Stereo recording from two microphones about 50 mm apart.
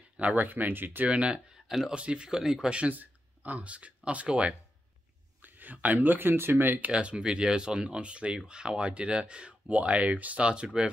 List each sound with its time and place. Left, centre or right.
0.2 s speech: right
1.0 s speech: right
2.8 s speech: right
5.4 s speech: right
6.9 s speech: right
10.4 s speech: centre